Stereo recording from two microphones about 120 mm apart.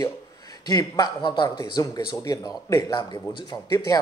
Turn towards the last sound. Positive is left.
turn(degrees=35)  # may be behind; listen again after turning